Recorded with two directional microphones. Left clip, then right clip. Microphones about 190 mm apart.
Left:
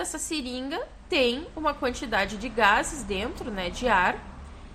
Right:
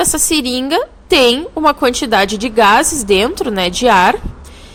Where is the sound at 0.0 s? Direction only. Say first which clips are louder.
Right 17 dB; 50° right (ahead or behind).